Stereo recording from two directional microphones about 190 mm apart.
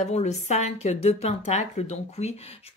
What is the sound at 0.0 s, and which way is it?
Speech, 35° left (ahead or behind).